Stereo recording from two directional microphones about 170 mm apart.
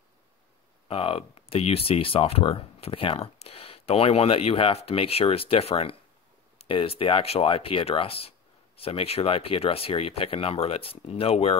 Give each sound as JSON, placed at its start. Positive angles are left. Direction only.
{"t": 0.8, "sound": "speech", "side_deg": 35}